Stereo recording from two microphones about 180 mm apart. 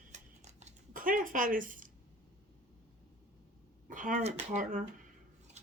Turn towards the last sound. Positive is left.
turn(degrees=-50)  # may be behind; listen again after turning